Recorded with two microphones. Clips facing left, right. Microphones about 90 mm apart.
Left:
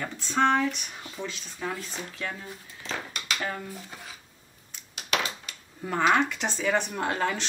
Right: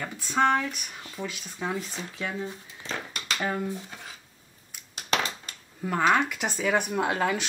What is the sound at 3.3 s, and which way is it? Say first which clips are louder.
Speech: right 5 dB; 10° right (ahead or behind).